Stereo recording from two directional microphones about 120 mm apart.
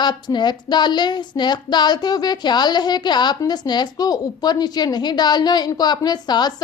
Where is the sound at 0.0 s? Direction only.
40° left (ahead or behind).